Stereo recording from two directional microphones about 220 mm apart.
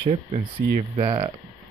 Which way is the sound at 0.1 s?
30° right (ahead or behind).